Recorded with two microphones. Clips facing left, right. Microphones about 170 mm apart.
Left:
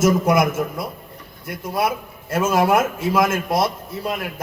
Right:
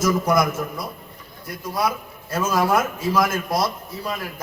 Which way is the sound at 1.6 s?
25° left (ahead or behind).